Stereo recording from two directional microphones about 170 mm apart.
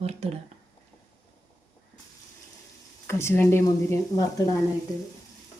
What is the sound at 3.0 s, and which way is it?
Speech, 15° left (ahead or behind).